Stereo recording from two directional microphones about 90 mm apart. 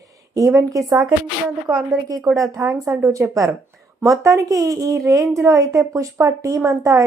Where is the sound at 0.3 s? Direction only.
35° right (ahead or behind).